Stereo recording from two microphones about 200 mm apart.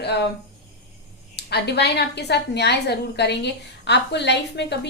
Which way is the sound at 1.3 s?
55° left (ahead or behind).